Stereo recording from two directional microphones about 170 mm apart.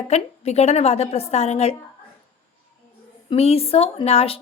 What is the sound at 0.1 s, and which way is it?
A woman's voice, 40° left (ahead or behind).